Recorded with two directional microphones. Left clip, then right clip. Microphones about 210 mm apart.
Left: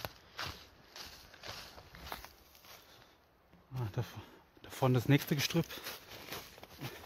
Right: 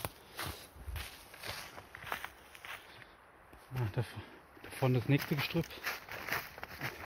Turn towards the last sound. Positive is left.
turn(degrees=10)  # may be behind; listen again after turning